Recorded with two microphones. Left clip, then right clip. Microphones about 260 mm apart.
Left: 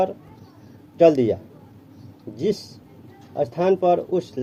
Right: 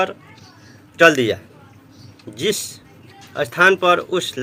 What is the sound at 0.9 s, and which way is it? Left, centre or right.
Speech, centre.